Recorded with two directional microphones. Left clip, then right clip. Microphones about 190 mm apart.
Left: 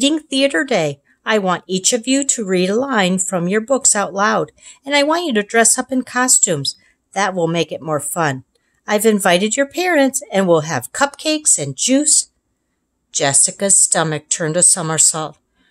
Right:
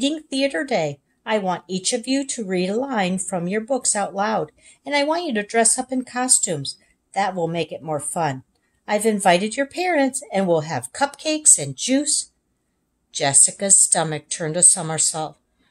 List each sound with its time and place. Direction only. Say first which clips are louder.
0.0 s a woman's voice: left 6 dB; 30° left (ahead or behind)